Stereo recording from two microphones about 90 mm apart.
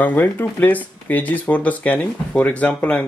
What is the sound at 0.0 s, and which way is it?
Speech, 20° left (ahead or behind).